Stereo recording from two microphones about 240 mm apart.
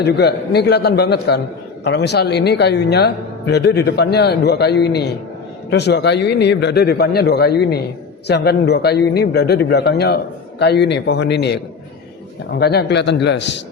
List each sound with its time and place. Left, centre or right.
0.0 s speech: left